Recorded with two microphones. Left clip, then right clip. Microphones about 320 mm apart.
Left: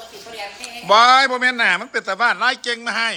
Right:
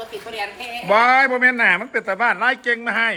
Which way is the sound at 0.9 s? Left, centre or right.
Centre.